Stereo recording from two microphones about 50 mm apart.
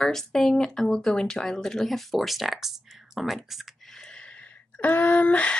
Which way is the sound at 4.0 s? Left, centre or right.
Centre.